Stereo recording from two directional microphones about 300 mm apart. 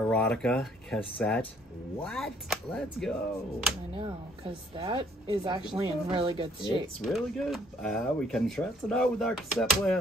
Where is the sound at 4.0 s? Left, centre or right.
Centre.